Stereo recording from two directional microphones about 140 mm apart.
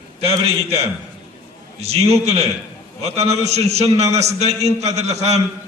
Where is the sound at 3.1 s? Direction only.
50° right (ahead or behind).